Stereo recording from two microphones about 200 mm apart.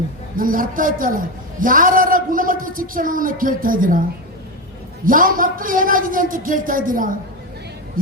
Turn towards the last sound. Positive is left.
turn(degrees=-45)  # may be behind; listen again after turning